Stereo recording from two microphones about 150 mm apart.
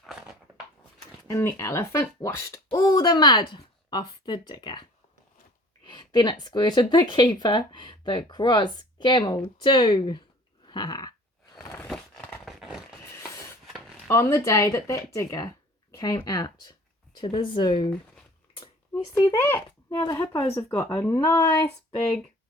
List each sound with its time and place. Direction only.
0.0 s a sound: 5° right (ahead or behind)
1.3 s speech: 20° left (ahead or behind)
10.7 s dog: 30° left (ahead or behind)
11.5 s a sound: 20° left (ahead or behind)
11.9 s a sound: centre (ahead or behind)
13.7 s rub: centre (ahead or behind)
14.1 s speech: 15° left (ahead or behind)
19.1 s speech: 20° left (ahead or behind)
20.3 s speech: 30° left (ahead or behind)